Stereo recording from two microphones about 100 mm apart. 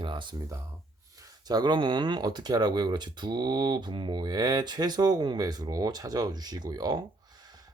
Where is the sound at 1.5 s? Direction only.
45° right (ahead or behind).